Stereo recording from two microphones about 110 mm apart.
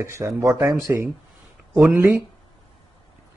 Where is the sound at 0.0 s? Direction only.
25° right (ahead or behind).